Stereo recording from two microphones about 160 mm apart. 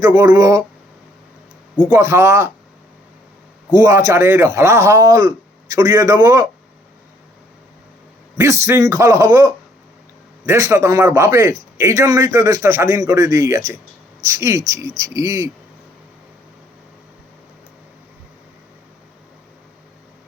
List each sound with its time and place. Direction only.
0.0 s a man's voice: 20° right (ahead or behind)
1.9 s a man's voice: 20° right (ahead or behind)
3.8 s a man's voice: 20° right (ahead or behind)
8.4 s a man's voice: 15° right (ahead or behind)